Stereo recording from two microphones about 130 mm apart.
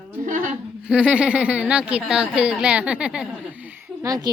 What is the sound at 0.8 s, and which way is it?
Speech, 5° right (ahead or behind).